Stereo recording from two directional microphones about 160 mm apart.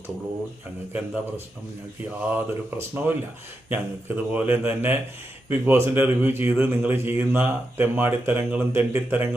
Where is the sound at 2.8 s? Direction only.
15° right (ahead or behind).